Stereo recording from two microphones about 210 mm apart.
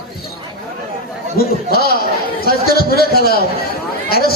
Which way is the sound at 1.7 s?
45° left (ahead or behind).